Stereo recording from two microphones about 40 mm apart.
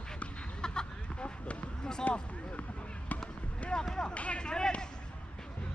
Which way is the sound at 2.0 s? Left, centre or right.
Left.